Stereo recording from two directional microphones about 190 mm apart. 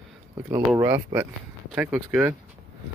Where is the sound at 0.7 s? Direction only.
10° right (ahead or behind).